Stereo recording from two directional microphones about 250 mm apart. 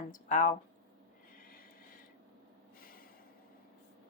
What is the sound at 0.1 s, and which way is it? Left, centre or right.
Speech, left.